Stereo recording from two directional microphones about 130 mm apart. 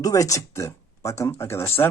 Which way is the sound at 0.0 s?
25° left (ahead or behind).